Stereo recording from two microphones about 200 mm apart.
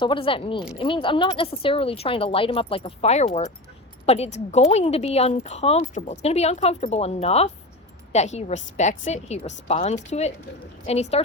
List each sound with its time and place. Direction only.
0.0 s a woman's voice: 25° left (ahead or behind)